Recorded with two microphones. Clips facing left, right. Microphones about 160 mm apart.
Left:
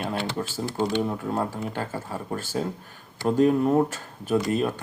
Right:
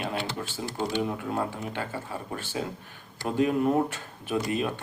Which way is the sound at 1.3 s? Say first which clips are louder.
Left 3 dB; 40° left (ahead or behind).